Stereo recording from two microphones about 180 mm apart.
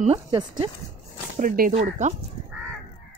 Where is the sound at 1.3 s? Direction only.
50° right (ahead or behind).